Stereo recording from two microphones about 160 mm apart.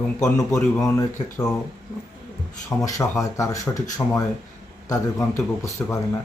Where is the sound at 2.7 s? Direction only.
20° left (ahead or behind).